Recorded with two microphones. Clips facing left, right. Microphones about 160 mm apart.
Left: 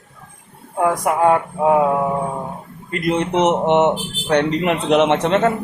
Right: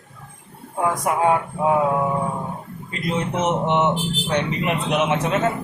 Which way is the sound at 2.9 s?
65° left (ahead or behind).